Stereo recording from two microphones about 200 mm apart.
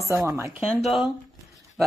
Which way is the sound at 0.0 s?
15° right (ahead or behind).